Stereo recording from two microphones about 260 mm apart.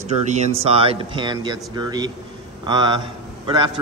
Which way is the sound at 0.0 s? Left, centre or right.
Right.